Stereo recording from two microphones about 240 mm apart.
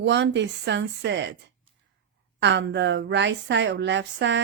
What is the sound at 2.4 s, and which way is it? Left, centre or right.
Speech, right.